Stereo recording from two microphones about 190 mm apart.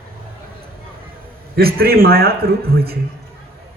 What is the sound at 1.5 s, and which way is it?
Speech, 55° right (ahead or behind).